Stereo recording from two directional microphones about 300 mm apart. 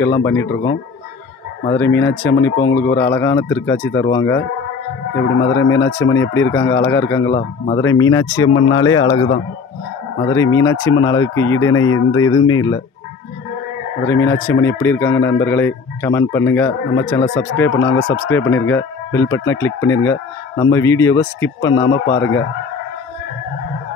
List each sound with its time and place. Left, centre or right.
0.0 s speech: centre
2.0 s speech: centre
5.4 s speech: centre
12.2 s speech: left
14.0 s speech: centre